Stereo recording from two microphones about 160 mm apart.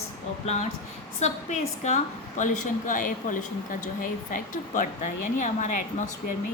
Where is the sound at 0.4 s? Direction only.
45° left (ahead or behind).